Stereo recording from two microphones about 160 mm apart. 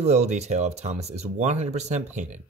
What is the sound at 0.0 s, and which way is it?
Speech, 45° right (ahead or behind).